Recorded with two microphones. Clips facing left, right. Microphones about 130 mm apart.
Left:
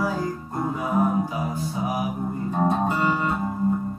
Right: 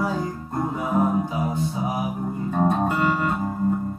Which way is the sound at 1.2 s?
25° right (ahead or behind).